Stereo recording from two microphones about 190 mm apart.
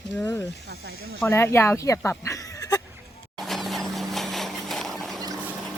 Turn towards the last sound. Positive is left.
turn(degrees=0)  # may be behind; listen again after turning